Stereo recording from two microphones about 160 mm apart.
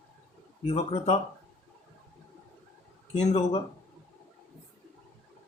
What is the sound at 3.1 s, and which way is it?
Speech, 40° left (ahead or behind).